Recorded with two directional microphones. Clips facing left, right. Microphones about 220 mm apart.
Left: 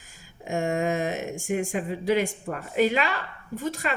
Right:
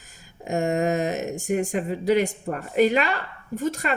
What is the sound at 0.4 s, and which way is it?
A woman's voice, 40° right (ahead or behind).